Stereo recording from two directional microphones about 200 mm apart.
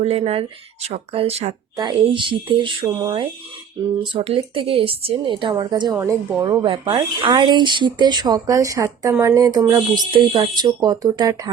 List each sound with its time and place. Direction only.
0.0 s speech: 30° right (ahead or behind)
1.7 s speech: 20° right (ahead or behind)